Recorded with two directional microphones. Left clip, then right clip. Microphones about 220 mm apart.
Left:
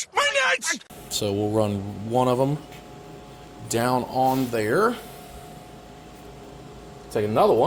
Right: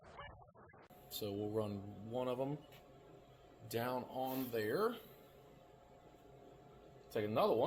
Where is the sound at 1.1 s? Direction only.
40° left (ahead or behind).